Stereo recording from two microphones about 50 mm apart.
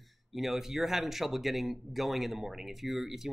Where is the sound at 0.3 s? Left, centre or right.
Centre.